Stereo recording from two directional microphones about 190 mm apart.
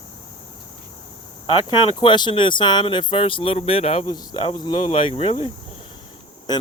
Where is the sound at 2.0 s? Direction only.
25° left (ahead or behind).